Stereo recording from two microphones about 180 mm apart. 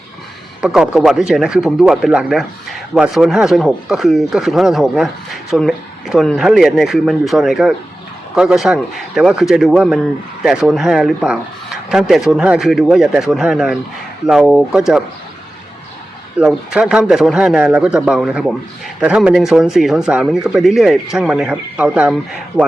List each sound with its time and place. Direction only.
0.6 s speech: 5° right (ahead or behind)
16.4 s speech: 5° right (ahead or behind)